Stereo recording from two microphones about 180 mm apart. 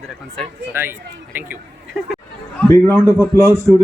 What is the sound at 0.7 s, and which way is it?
Speech, 10° right (ahead or behind).